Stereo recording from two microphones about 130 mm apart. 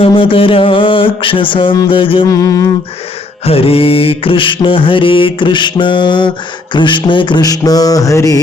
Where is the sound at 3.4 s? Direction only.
50° left (ahead or behind).